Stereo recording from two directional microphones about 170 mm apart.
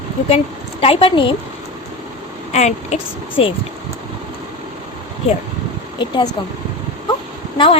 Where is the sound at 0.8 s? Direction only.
35° left (ahead or behind).